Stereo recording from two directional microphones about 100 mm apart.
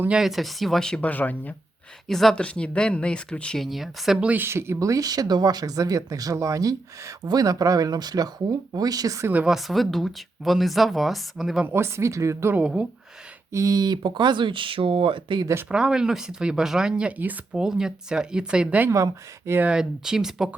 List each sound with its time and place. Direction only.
0.1 s speech: 5° right (ahead or behind); by 1.5 s 15° left (ahead or behind)
2.0 s speech: 5° left (ahead or behind)
4.3 s speech: 20° right (ahead or behind); by 9.2 s 35° right (ahead or behind)
9.2 s speech: 15° right (ahead or behind)
9.5 s speech: centre (ahead or behind)
11.6 s speech: 25° right (ahead or behind)
12.5 s speech: 10° right (ahead or behind)
13.5 s speech: 35° right (ahead or behind); by 15.4 s 55° right (ahead or behind)
15.7 s speech: 5° right (ahead or behind)
18.9 s speech: 30° right (ahead or behind)
19.5 s speech: 10° right (ahead or behind)